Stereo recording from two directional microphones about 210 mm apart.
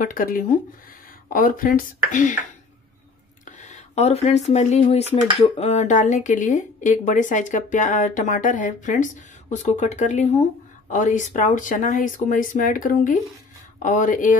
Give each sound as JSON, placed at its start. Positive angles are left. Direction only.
{"t": 0.0, "sound": "speech", "side_deg": 40}
{"t": 3.4, "sound": "speech", "side_deg": 35}